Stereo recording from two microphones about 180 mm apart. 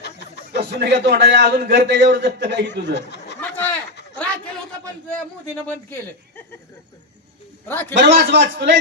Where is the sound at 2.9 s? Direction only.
70° left (ahead or behind).